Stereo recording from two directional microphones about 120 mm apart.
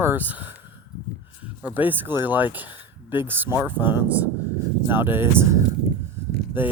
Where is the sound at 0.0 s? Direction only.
15° right (ahead or behind).